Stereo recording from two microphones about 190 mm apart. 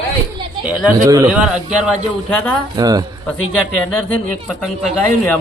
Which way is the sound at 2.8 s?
20° right (ahead or behind).